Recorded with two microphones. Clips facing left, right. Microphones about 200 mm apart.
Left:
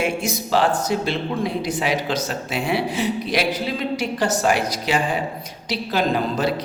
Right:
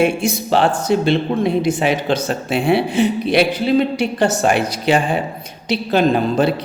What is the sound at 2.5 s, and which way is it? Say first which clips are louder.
Speech: right 7 dB; 30° right (ahead or behind).